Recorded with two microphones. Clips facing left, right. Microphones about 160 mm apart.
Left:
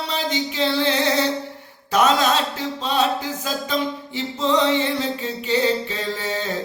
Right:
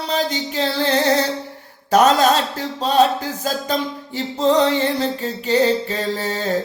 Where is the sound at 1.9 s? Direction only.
40° right (ahead or behind).